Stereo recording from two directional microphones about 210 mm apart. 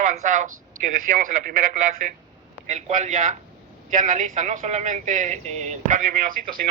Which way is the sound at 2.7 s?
35° right (ahead or behind).